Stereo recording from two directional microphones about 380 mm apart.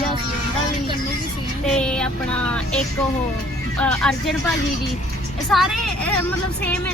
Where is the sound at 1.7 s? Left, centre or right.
Centre.